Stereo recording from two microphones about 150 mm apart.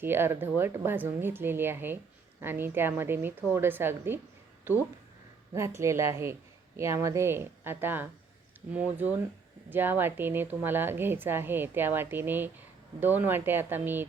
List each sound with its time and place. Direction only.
0.0 s a woman's voice: 15° right (ahead or behind)
5.5 s a woman's voice: 20° right (ahead or behind)